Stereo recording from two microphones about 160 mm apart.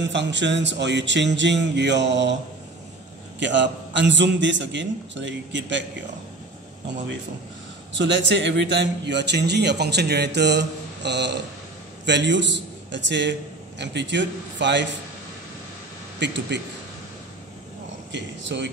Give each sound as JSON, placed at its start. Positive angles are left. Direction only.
{"t": 0.0, "sound": "a man's voice", "side_deg": -90}
{"t": 3.3, "sound": "a man's voice", "side_deg": -90}
{"t": 8.1, "sound": "a man's voice", "side_deg": -90}
{"t": 16.2, "sound": "a man's voice", "side_deg": -90}
{"t": 18.1, "sound": "a man's voice", "side_deg": -90}